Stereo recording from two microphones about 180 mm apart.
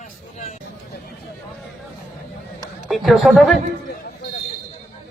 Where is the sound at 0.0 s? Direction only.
40° left (ahead or behind).